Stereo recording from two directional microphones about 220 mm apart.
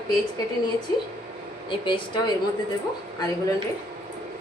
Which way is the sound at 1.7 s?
20° left (ahead or behind).